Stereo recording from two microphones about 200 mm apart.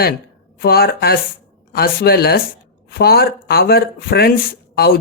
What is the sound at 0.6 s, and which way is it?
Speech, 50° left (ahead or behind).